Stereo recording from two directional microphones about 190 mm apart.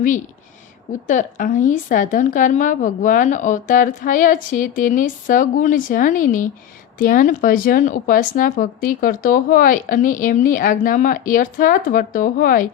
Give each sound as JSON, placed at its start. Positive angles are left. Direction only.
{"t": 1.0, "sound": "speech", "side_deg": 40}